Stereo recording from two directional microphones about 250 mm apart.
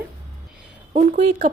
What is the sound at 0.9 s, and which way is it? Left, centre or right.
Speech, right.